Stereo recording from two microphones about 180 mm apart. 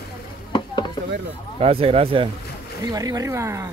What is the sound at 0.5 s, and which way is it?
Chopping, 25° left (ahead or behind).